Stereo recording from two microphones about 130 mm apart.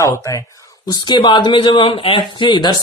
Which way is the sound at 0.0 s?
25° left (ahead or behind).